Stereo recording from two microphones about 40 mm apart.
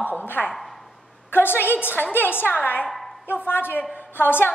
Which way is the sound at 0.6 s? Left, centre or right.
Centre.